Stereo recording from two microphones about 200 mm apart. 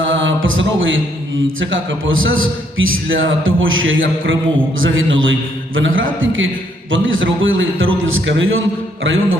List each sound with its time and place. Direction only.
0.1 s music: 75° right (ahead or behind)
1.5 s a man's voice: 75° right (ahead or behind)